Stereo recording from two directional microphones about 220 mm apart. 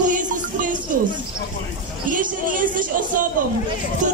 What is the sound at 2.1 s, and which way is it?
Speech, 35° right (ahead or behind).